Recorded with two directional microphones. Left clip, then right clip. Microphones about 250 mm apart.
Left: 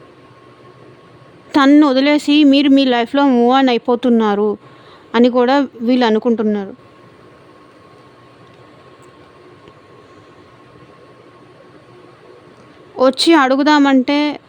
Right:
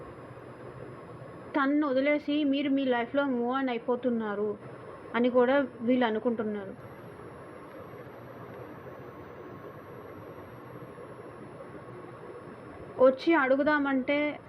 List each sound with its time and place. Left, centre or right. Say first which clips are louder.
1.5 s a woman's voice: left 16 dB; left
13.0 s a woman's voice: left 12 dB; left